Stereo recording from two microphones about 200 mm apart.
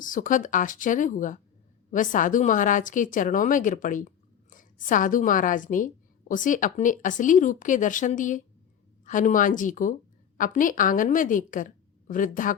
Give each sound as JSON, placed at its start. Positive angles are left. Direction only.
{"t": 0.0, "sound": "a woman's voice", "side_deg": 40}